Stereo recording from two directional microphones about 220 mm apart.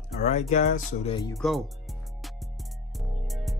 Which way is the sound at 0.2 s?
30° left (ahead or behind).